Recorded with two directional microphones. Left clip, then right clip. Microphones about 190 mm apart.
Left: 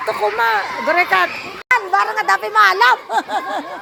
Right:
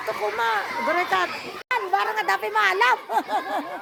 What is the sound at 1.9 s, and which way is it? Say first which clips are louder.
Speech: left 7 dB; 15° right (ahead or behind).